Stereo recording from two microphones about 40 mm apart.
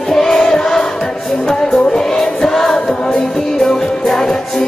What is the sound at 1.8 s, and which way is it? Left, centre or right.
Music, centre.